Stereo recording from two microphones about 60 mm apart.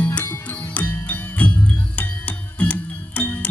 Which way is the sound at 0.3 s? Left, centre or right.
Left.